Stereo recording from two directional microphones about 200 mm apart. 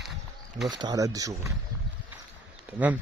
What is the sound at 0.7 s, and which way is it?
Speech, 20° right (ahead or behind).